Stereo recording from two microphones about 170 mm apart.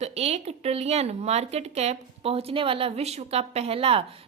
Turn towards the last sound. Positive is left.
turn(degrees=-35)  # may be behind; listen again after turning